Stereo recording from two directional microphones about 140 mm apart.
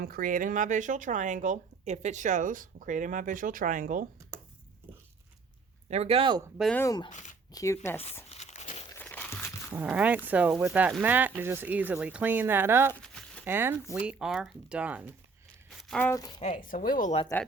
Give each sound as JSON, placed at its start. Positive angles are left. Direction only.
{"t": 0.0, "sound": "speech", "side_deg": -90}
{"t": 5.9, "sound": "speech", "side_deg": -45}
{"t": 6.7, "sound": "speech", "side_deg": 25}
{"t": 8.3, "sound": "a sound", "side_deg": 55}
{"t": 9.0, "sound": "a sound", "side_deg": 15}
{"t": 9.7, "sound": "speech", "side_deg": -10}
{"t": 12.9, "sound": "a sound", "side_deg": 5}
{"t": 13.4, "sound": "speech", "side_deg": -15}
{"t": 13.9, "sound": "speech", "side_deg": -5}
{"t": 15.7, "sound": "crumpling", "side_deg": 0}
{"t": 16.0, "sound": "speech", "side_deg": 25}
{"t": 16.4, "sound": "speech", "side_deg": 65}
{"t": 17.3, "sound": "speech", "side_deg": 15}